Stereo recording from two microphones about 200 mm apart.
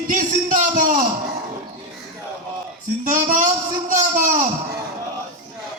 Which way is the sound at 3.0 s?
40° right (ahead or behind).